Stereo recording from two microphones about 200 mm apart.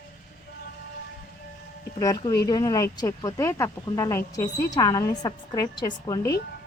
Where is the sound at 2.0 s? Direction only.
20° left (ahead or behind).